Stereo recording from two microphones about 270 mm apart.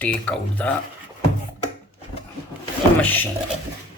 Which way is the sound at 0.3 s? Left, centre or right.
Centre.